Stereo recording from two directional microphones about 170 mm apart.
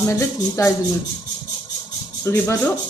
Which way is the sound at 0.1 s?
20° left (ahead or behind).